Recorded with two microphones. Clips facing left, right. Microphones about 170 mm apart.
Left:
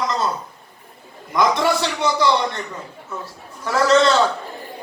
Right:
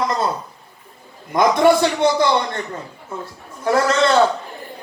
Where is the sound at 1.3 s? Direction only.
55° right (ahead or behind).